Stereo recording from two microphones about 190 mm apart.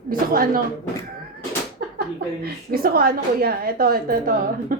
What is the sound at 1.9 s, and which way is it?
A woman's voice, 55° right (ahead or behind).